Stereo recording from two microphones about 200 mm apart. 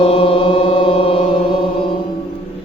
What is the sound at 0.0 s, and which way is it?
Mantra, 30° left (ahead or behind).